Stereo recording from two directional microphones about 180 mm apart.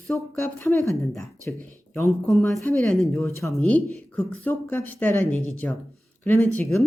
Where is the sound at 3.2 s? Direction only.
15° left (ahead or behind).